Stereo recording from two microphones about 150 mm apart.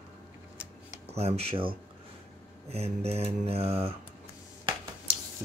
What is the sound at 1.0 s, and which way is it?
Speech, 45° right (ahead or behind).